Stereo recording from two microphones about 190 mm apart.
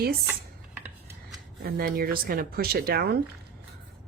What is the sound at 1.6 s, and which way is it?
Speech, 50° right (ahead or behind).